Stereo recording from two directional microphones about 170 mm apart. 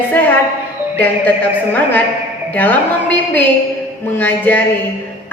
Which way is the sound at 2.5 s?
10° left (ahead or behind).